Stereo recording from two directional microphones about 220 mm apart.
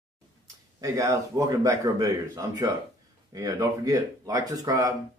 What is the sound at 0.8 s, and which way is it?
Speech, 15° right (ahead or behind).